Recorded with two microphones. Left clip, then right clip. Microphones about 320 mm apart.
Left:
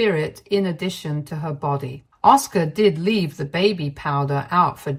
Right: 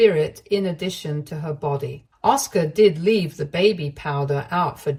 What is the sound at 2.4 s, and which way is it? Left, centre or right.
Speech, centre.